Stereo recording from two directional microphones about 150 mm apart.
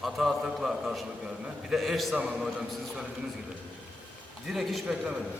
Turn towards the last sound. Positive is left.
turn(degrees=-5)  # may be behind; listen again after turning